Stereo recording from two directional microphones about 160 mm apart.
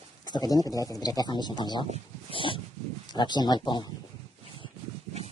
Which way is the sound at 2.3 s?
35° left (ahead or behind).